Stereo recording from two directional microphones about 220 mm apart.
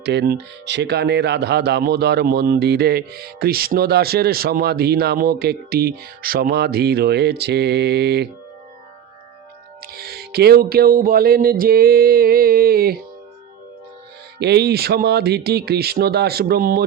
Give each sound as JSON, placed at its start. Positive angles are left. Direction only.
{"t": 0.0, "sound": "speech", "side_deg": -50}
{"t": 9.8, "sound": "music", "side_deg": -45}
{"t": 14.3, "sound": "speech", "side_deg": -50}